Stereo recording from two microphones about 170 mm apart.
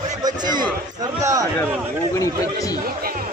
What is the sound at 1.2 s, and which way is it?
Speech, 20° right (ahead or behind).